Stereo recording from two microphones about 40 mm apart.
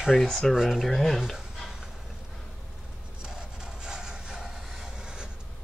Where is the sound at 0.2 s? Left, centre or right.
Centre.